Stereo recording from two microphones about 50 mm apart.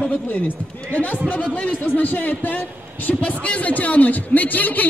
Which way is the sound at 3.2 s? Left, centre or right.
Left.